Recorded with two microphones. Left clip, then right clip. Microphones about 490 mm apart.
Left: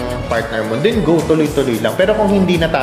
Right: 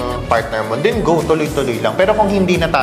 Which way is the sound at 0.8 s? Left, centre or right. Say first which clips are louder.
Left 1 dB; right.